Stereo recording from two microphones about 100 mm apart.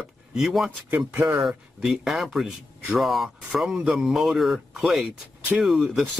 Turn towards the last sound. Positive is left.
turn(degrees=-5)  # may be behind; listen again after turning